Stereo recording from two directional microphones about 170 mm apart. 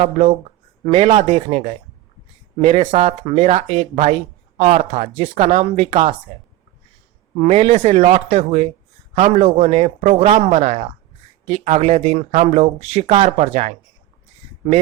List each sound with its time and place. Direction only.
0.0 s speech: 40° right (ahead or behind)
5.7 s speech: 30° right (ahead or behind)
7.3 s speech: 40° right (ahead or behind)